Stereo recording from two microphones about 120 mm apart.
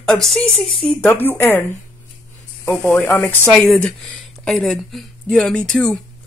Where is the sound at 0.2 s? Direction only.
Centre (ahead or behind).